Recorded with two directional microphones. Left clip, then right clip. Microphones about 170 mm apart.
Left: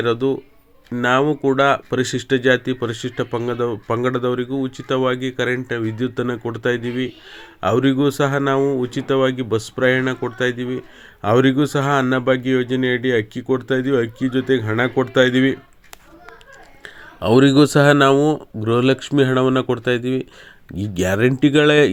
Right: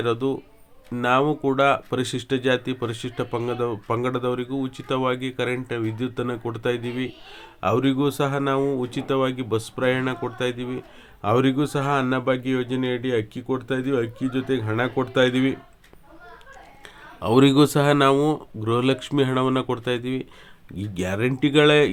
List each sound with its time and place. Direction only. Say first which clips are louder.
0.0 s speech: left 5 dB; 20° left (ahead or behind)
16.8 s speech: left 6 dB; 25° left (ahead or behind)